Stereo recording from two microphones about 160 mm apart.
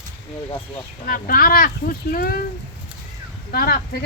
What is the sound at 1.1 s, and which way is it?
Speech, 65° left (ahead or behind).